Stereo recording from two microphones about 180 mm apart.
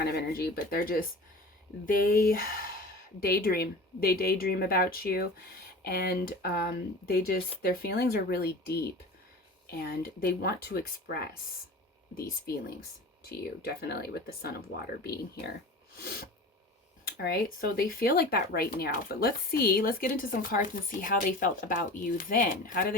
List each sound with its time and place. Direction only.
0.0 s speech: 60° left (ahead or behind)
17.1 s speech: 60° left (ahead or behind)